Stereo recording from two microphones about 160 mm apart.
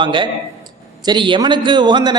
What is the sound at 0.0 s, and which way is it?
A man's voice, 30° right (ahead or behind).